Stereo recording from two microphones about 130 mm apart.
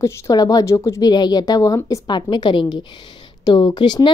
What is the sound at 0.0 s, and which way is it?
A woman's voice, 25° left (ahead or behind).